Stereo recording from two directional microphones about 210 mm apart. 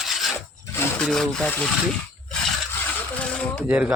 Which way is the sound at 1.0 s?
5° left (ahead or behind).